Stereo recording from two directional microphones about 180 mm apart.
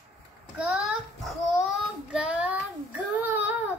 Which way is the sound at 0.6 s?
5° right (ahead or behind).